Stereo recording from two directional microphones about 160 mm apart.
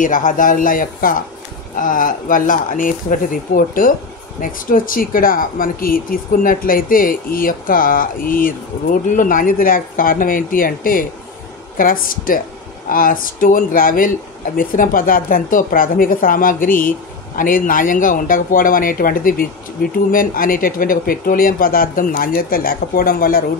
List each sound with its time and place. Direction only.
0.0 s speech: 55° left (ahead or behind)